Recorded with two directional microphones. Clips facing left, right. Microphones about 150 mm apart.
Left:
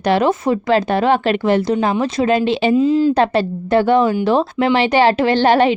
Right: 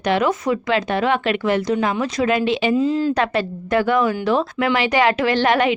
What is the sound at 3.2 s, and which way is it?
A woman's voice, 30° left (ahead or behind).